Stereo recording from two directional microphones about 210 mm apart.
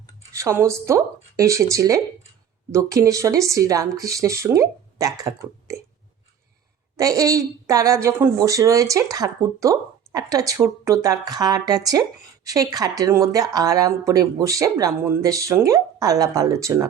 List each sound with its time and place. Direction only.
0.3 s speech: 15° right (ahead or behind)
6.9 s speech: 15° right (ahead or behind)